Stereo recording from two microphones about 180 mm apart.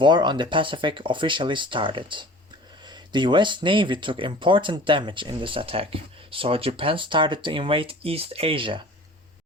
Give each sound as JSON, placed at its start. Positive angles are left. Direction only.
{"t": 0.0, "sound": "speech", "side_deg": -25}